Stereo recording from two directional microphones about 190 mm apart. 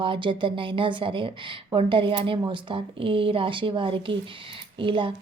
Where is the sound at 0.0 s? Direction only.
25° right (ahead or behind).